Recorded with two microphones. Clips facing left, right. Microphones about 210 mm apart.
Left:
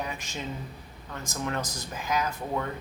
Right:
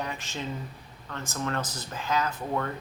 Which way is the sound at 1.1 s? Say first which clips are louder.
Right 1 dB; 15° left (ahead or behind).